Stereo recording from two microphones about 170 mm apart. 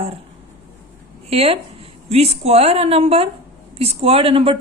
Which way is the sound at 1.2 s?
35° right (ahead or behind).